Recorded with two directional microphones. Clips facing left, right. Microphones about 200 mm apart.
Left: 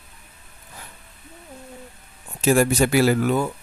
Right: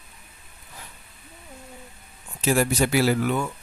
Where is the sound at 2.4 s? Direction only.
45° left (ahead or behind).